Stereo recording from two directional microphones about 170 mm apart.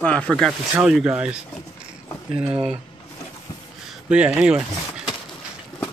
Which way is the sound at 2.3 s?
35° right (ahead or behind).